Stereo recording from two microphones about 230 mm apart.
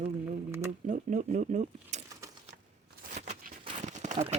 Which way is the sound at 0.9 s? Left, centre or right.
Right.